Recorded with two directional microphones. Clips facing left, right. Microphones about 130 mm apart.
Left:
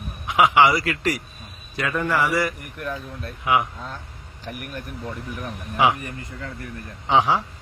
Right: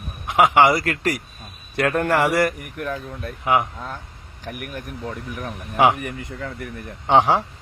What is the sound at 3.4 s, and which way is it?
Speech, 40° right (ahead or behind).